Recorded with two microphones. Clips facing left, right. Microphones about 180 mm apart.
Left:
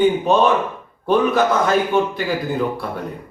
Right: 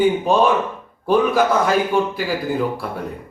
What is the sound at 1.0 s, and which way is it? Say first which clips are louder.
Speech: even; 10° right (ahead or behind).